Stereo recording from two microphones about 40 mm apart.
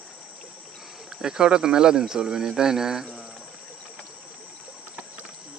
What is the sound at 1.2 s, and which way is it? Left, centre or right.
Speech, centre.